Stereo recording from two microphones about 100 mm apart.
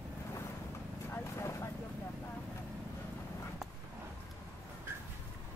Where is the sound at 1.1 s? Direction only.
25° left (ahead or behind).